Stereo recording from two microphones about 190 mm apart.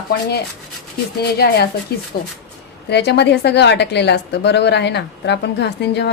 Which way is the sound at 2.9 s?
60° left (ahead or behind).